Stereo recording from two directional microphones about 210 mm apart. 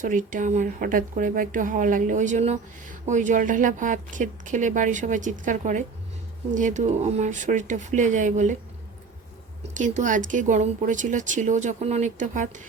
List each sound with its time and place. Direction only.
0.0 s speech: 40° right (ahead or behind)
9.7 s speech: 35° right (ahead or behind)